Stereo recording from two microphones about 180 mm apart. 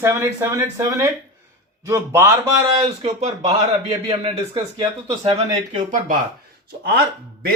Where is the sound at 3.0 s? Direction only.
35° right (ahead or behind).